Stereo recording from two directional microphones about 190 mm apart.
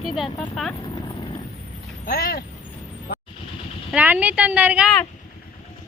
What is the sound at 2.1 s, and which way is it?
Speech, 50° left (ahead or behind).